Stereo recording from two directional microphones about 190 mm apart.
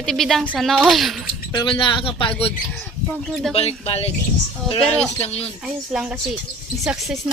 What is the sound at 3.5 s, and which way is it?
A woman's voice, 30° left (ahead or behind).